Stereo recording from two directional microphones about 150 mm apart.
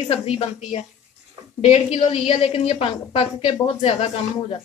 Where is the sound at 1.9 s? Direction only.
40° left (ahead or behind).